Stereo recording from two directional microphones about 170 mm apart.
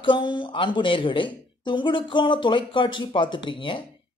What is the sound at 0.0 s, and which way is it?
Speech, 30° left (ahead or behind).